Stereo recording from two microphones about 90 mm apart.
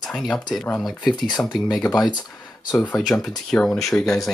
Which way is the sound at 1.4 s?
10° left (ahead or behind).